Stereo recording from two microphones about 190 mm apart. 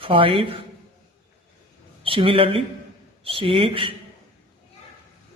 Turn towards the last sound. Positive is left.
turn(degrees=-25)  # may be behind; listen again after turning